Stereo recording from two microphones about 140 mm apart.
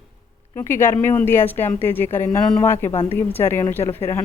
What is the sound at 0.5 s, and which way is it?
Speech, 15° left (ahead or behind).